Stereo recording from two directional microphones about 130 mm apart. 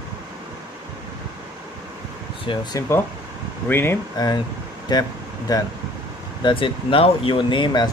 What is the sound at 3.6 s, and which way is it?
Speech, 15° left (ahead or behind).